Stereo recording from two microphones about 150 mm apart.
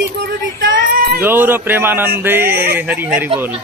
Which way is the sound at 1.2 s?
15° right (ahead or behind).